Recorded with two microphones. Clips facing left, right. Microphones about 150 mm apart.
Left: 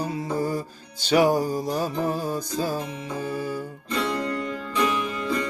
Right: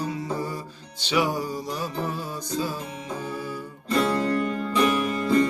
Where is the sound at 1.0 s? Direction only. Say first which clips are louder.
Left 5 dB; 45° left (ahead or behind).